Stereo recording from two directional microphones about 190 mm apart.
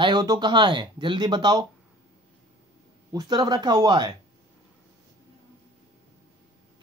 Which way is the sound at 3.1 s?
20° right (ahead or behind).